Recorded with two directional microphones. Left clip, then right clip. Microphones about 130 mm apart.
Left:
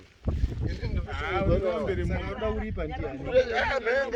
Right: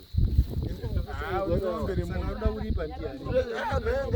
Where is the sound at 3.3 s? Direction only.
80° right; by 4.1 s 55° right (ahead or behind).